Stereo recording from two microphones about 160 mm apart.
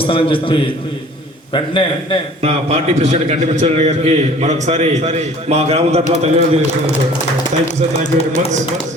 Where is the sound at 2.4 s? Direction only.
40° right (ahead or behind).